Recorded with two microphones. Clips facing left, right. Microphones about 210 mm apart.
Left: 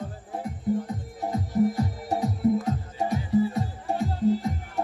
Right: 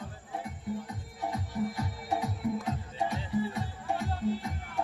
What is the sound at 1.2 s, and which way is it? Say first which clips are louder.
Music: left 9 dB; 40° left (ahead or behind).